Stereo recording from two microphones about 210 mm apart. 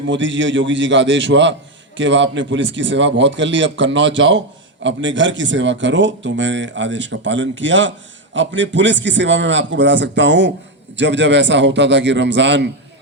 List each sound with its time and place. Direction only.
0.0 s a man's voice: 60° right (ahead or behind)